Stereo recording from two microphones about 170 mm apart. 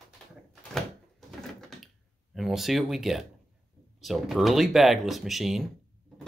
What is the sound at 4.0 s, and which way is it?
Speech, centre (ahead or behind).